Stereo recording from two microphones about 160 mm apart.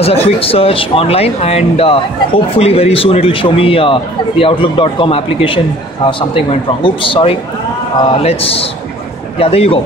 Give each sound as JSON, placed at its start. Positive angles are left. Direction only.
{"t": 0.0, "sound": "speech", "side_deg": 35}